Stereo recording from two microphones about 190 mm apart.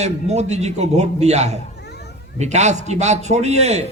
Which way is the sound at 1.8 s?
60° left (ahead or behind).